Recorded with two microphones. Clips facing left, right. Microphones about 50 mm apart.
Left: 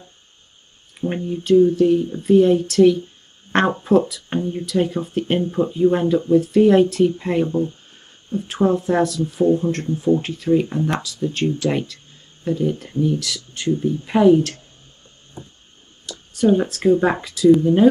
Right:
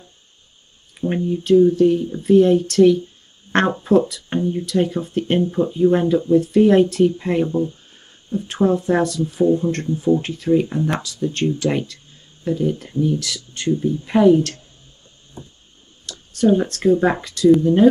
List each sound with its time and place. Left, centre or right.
1.0 s speech: centre
15.4 s a sound: left
16.1 s speech: centre